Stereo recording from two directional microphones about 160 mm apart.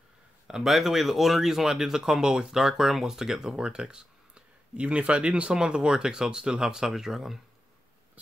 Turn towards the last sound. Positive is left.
turn(degrees=0)  # may be behind; listen again after turning